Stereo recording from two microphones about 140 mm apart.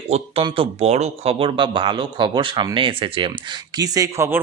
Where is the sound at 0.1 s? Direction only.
50° right (ahead or behind).